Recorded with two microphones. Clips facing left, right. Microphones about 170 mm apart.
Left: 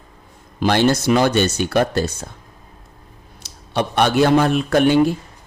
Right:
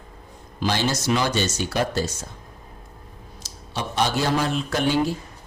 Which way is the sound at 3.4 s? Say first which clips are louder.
Left 9 dB; 65° left (ahead or behind).